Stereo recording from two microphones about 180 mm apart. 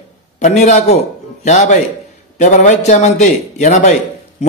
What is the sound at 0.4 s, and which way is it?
A man's voice, 40° left (ahead or behind).